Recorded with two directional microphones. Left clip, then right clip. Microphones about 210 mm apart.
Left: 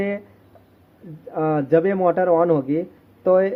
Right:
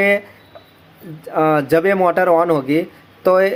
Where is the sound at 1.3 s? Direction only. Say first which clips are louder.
Right 4 dB; 15° right (ahead or behind).